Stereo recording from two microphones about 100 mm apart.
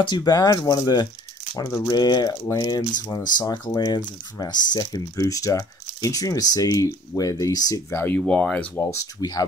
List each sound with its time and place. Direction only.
0.0 s speech: 45° left (ahead or behind)
7.9 s speech: 20° left (ahead or behind)
8.9 s speech: 40° left (ahead or behind)